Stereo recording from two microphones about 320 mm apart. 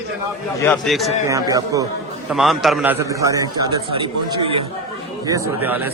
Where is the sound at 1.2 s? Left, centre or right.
Centre.